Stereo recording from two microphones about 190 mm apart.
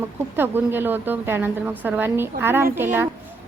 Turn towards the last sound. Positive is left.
turn(degrees=-10)  # may be behind; listen again after turning